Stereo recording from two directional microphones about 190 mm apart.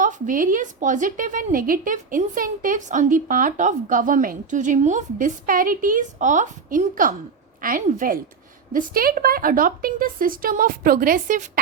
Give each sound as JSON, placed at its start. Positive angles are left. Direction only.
{"t": 0.0, "sound": "speech", "side_deg": -45}